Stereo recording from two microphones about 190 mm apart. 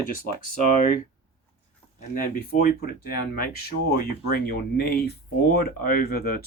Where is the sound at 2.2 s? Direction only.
50° left (ahead or behind).